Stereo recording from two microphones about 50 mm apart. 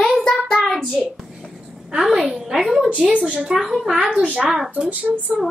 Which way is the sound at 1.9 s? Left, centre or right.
Centre.